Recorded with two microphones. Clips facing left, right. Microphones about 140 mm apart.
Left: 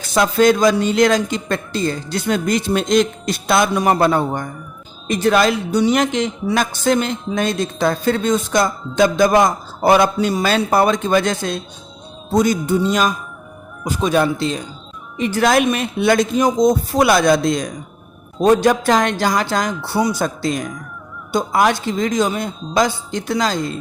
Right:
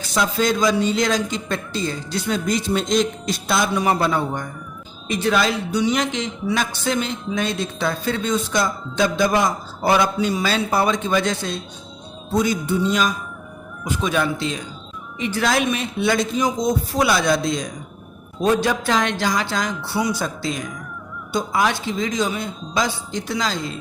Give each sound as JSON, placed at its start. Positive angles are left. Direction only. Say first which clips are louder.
{"t": 0.1, "sound": "speech", "louder": "left 7 dB", "side_deg": 55}
{"t": 3.8, "sound": "speech", "louder": "left 4 dB", "side_deg": 50}
{"t": 15.2, "sound": "speech", "louder": "left 5 dB", "side_deg": 45}